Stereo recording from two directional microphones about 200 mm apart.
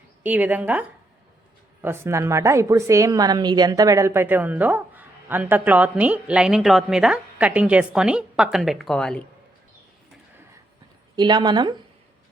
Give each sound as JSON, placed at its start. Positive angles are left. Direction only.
{"t": 0.2, "sound": "a woman's voice", "side_deg": -10}
{"t": 11.2, "sound": "a woman's voice", "side_deg": -20}